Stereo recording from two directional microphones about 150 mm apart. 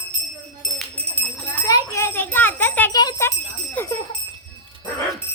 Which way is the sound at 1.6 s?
20° left (ahead or behind).